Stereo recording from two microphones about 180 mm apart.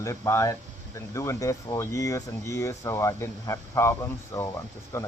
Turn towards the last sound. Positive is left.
turn(degrees=15)  # may be behind; listen again after turning